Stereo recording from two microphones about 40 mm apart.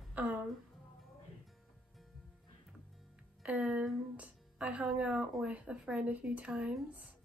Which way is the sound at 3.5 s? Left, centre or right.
Right.